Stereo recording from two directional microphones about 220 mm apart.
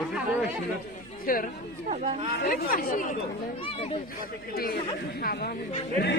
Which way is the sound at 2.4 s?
40° left (ahead or behind).